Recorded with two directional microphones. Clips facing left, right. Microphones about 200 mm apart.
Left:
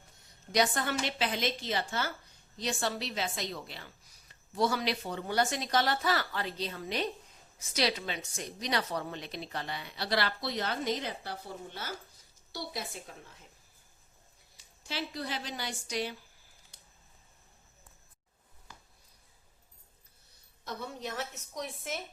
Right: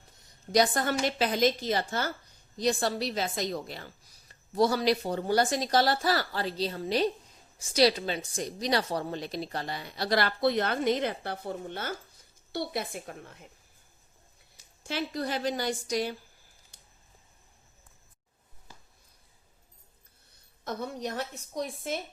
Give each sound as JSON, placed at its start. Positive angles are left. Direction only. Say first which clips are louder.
{"t": 0.5, "sound": "a woman's voice", "louder": "right 4 dB", "side_deg": -35}
{"t": 14.8, "sound": "a woman's voice", "louder": "right 5 dB", "side_deg": -50}
{"t": 20.7, "sound": "a woman's voice", "louder": "right 5 dB", "side_deg": -35}